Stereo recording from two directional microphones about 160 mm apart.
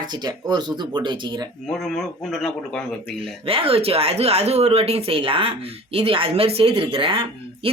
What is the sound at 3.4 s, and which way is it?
Speech, 35° right (ahead or behind).